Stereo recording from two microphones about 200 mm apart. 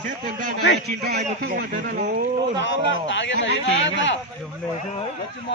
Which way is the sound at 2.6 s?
65° left (ahead or behind).